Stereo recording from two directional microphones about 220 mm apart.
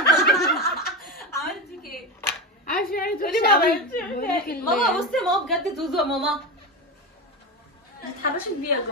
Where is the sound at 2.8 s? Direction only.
40° left (ahead or behind).